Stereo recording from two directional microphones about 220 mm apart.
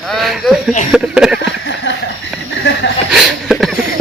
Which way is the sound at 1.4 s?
55° left (ahead or behind).